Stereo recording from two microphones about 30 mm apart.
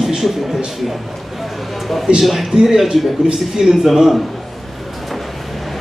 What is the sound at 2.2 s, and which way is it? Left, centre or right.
Speech, centre.